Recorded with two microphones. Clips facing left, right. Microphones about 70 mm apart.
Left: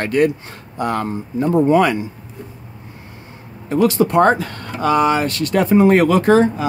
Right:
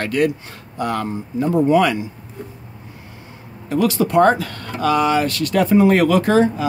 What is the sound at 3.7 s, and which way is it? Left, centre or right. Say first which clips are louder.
Speech: left 2 dB; left.